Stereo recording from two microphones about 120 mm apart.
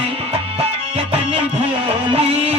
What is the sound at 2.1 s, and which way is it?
Music, 55° right (ahead or behind).